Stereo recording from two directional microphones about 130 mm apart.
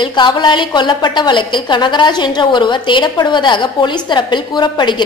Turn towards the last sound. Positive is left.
turn(degrees=35)  # may be behind; listen again after turning